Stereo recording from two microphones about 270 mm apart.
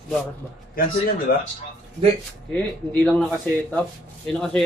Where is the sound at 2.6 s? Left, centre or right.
Centre.